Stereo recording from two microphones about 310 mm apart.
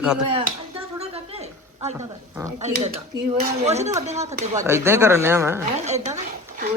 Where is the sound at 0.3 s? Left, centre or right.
Centre.